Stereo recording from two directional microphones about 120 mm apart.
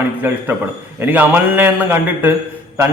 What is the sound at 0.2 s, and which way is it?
A man's voice, 15° right (ahead or behind).